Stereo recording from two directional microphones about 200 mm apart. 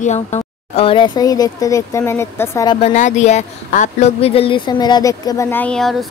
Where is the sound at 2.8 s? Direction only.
35° left (ahead or behind).